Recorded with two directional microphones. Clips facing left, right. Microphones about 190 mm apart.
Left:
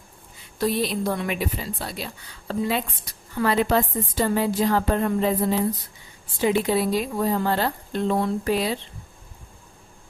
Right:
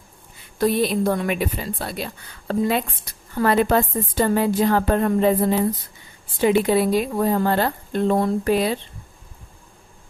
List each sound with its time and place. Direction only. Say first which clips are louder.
0.6 s a woman's voice: right 4 dB; 50° right (ahead or behind)